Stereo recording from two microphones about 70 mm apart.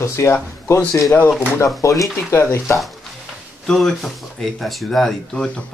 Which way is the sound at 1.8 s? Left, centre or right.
Left.